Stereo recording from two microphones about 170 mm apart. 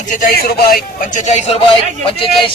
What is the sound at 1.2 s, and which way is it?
Speech, 40° left (ahead or behind).